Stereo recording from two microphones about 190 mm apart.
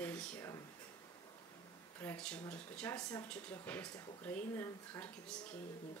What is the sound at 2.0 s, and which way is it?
Speech, 10° left (ahead or behind).